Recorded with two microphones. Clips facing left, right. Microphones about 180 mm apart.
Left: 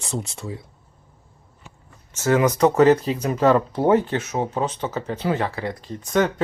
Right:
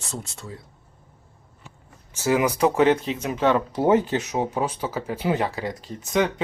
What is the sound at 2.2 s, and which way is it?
Speech, 10° right (ahead or behind).